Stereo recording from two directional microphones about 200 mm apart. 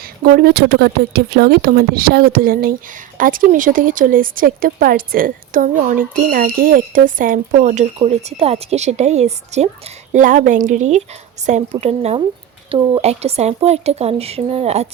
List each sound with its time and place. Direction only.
0.2 s speech: 50° right (ahead or behind); by 14.8 s 30° right (ahead or behind)